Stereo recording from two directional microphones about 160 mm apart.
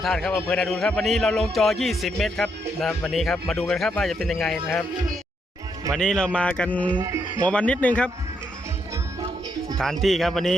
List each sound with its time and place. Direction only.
0.0 s speech: centre (ahead or behind)
5.9 s speech: 5° left (ahead or behind)
6.9 s speech: 20° right (ahead or behind)
7.4 s speech: 10° left (ahead or behind)
9.7 s speech: centre (ahead or behind)